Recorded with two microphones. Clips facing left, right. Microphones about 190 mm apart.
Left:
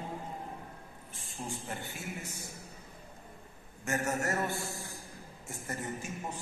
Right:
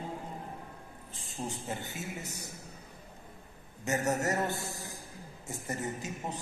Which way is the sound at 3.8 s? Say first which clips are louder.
Right 2 dB; 20° right (ahead or behind).